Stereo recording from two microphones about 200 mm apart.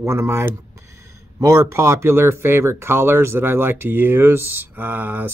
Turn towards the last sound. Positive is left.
turn(degrees=-10)  # may be behind; listen again after turning